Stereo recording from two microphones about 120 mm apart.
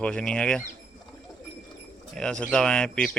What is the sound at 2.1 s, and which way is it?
Speech, 5° left (ahead or behind).